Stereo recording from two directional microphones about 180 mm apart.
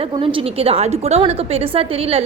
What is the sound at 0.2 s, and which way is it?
A woman's voice, 30° right (ahead or behind).